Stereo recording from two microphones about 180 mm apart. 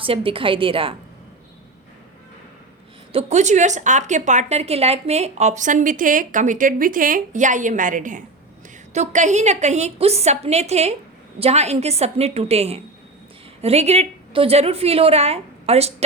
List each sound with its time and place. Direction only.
0.0 s a woman's voice: 30° right (ahead or behind)
3.1 s a woman's voice: 35° right (ahead or behind)